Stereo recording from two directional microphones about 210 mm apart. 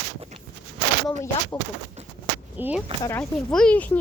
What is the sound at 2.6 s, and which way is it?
Speech, 10° right (ahead or behind).